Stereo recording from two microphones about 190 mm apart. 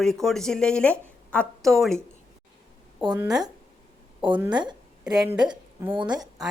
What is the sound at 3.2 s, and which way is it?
Speech, 5° right (ahead or behind).